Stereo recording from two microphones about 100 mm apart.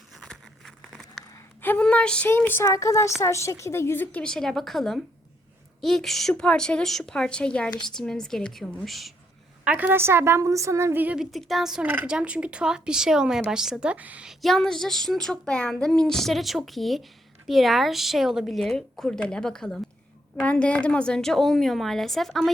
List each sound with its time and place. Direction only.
0.2 s a sound: centre (ahead or behind)
1.6 s a woman's voice: 15° left (ahead or behind)
2.3 s a woman's voice: 20° left (ahead or behind)
4.2 s a woman's voice: 5° left (ahead or behind)
9.6 s a woman's voice: 15° right (ahead or behind)
11.0 s speech: 10° right (ahead or behind)
11.3 s a woman's voice: centre (ahead or behind)
14.3 s a woman's voice: 5° left (ahead or behind)